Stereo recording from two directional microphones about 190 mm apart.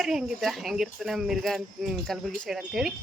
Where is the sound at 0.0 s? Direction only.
Centre (ahead or behind).